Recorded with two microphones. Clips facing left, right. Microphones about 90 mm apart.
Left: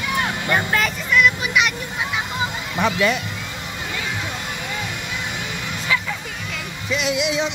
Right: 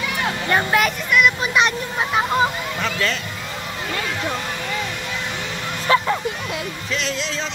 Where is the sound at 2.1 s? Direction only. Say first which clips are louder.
Right 8 dB; 40° right (ahead or behind).